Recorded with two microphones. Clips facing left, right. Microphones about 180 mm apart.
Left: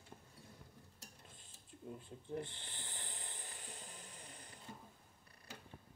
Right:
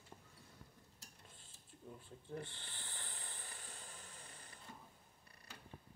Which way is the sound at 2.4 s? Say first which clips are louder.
Left 4 dB; 15° left (ahead or behind).